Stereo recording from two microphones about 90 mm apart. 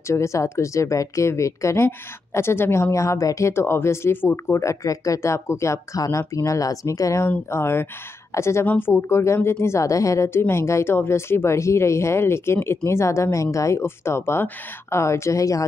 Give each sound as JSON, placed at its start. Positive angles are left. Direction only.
{"t": 0.1, "sound": "speech", "side_deg": 35}